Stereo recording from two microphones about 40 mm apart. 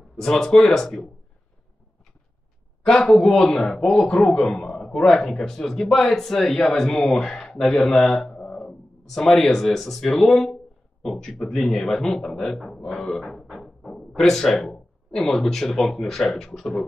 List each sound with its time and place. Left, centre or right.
0.2 s a man's voice: centre
2.8 s a man's voice: centre
8.4 s music: left
9.1 s a man's voice: centre
13.3 s a sound: centre
15.1 s a man's voice: centre